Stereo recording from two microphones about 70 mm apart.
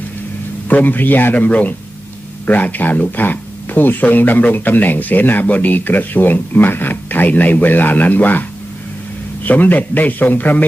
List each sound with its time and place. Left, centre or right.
0.7 s speech: left